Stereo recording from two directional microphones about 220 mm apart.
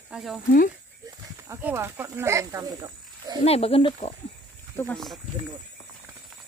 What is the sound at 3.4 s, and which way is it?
Speech, 25° left (ahead or behind).